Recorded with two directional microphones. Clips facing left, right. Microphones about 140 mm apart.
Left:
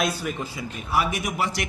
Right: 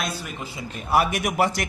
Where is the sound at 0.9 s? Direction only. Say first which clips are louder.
Right 4 dB; 60° right (ahead or behind).